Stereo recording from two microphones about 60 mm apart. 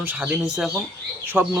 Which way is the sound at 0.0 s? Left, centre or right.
Right.